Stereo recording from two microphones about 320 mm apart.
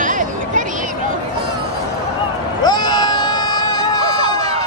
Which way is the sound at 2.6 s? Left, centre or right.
Centre.